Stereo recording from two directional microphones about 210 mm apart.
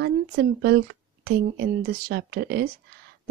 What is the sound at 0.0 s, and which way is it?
A woman's voice, 50° right (ahead or behind).